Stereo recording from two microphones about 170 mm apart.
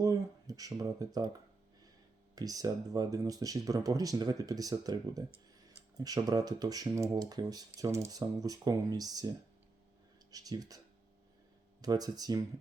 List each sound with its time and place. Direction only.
0.0 s speech: 20° right (ahead or behind)
2.3 s speech: 20° right (ahead or behind)
10.3 s speech: 20° right (ahead or behind)
11.8 s speech: 25° right (ahead or behind)